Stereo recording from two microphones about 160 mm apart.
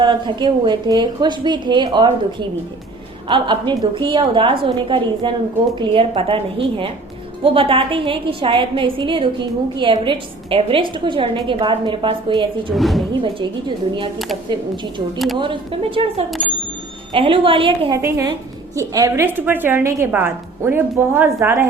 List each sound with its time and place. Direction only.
0.0 s a woman's voice: 30° right (ahead or behind)
12.7 s speech: centre (ahead or behind)
15.4 s a woman's voice: 35° right (ahead or behind)
18.0 s a woman's voice: 20° right (ahead or behind)